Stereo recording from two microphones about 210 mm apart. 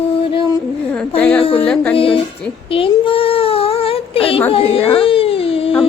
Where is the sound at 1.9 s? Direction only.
25° left (ahead or behind).